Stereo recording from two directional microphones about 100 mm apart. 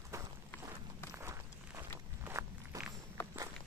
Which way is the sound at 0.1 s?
30° right (ahead or behind).